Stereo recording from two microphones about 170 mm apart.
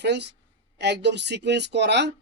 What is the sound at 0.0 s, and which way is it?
Speech, 90° right.